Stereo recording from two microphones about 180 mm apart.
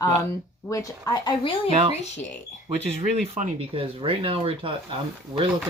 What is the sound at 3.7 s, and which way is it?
Speech, 30° right (ahead or behind).